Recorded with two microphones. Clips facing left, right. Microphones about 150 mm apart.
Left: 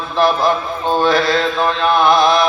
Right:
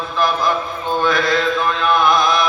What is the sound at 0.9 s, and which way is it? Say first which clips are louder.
Mantra: left 3 dB; 30° left (ahead or behind).